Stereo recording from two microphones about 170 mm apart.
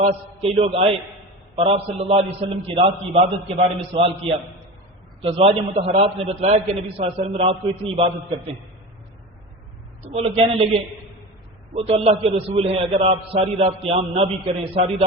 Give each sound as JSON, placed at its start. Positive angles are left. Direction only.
{"t": 0.0, "sound": "a man's voice", "side_deg": -35}
{"t": 10.1, "sound": "a man's voice", "side_deg": -35}
{"t": 11.8, "sound": "a man's voice", "side_deg": -35}